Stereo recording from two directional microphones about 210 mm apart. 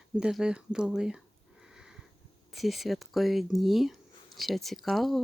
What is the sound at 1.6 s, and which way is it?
Sniff, 5° right (ahead or behind).